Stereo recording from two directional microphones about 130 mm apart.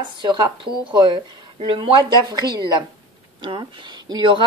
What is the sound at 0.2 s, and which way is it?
Speech, 35° right (ahead or behind).